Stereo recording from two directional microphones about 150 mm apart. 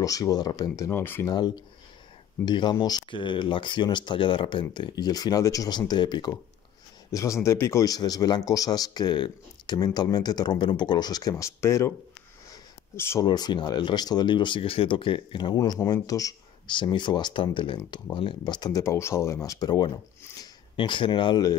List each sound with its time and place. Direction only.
0.0 s speech: 25° left (ahead or behind)
1.3 s speech: 30° left (ahead or behind)
12.9 s speech: 15° left (ahead or behind)
13.2 s speech: 30° left (ahead or behind)